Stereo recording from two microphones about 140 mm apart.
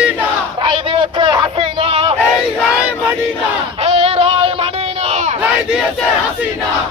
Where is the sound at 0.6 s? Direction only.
35° right (ahead or behind).